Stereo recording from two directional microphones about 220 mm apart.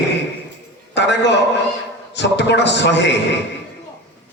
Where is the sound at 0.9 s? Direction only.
50° left (ahead or behind).